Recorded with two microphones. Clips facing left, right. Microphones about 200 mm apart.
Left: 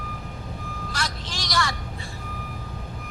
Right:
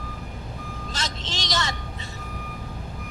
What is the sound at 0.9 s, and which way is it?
Vehicle, 25° right (ahead or behind).